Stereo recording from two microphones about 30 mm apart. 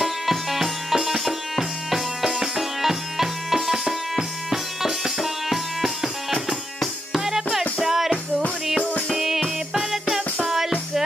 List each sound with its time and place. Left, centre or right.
0.0 s music: centre
7.1 s music: centre
9.1 s music: centre